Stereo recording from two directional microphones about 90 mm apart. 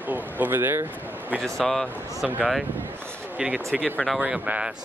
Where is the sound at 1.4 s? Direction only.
5° left (ahead or behind).